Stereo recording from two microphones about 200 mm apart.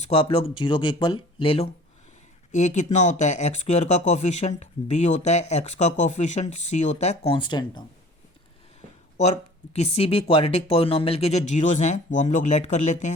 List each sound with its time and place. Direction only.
0.1 s speech: 30° left (ahead or behind)
9.3 s speech: 30° left (ahead or behind)